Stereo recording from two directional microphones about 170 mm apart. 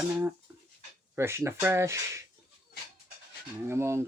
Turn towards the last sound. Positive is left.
turn(degrees=-15)  # may be behind; listen again after turning